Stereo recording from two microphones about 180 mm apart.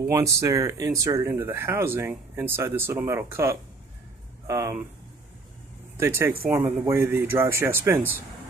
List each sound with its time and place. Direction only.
0.0 s speech: 15° right (ahead or behind)
5.9 s speech: 15° right (ahead or behind)